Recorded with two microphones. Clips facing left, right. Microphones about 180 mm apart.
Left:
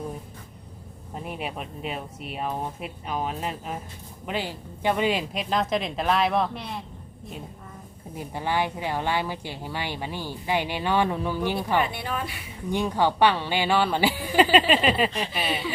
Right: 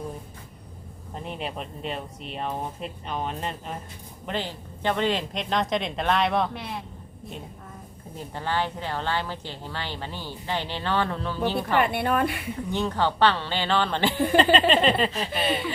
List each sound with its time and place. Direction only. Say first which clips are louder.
1.1 s speech: even; 5° left (ahead or behind)
8.1 s speech: left 2 dB; 10° left (ahead or behind)
11.8 s a woman's voice: right 5 dB; 55° right (ahead or behind)
12.7 s speech: left 3 dB; 15° left (ahead or behind)